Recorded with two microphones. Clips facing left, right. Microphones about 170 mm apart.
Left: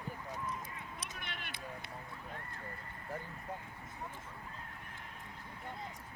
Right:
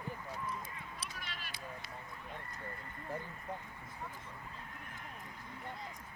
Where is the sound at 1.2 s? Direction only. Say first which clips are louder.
Left 1 dB; 60° left (ahead or behind).